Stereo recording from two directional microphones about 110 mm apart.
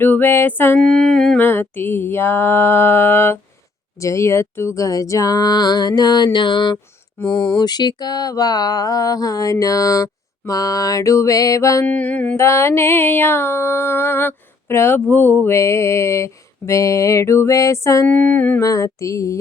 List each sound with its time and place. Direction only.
0.0 s music: 20° left (ahead or behind)
0.8 s a sound: 5° left (ahead or behind)
1.4 s music: 20° left (ahead or behind)
4.0 s mantra: 25° left (ahead or behind)
11.9 s music: 15° left (ahead or behind)
12.4 s music: 25° left (ahead or behind)
18.1 s music: 15° left (ahead or behind)
18.6 s music: 30° left (ahead or behind)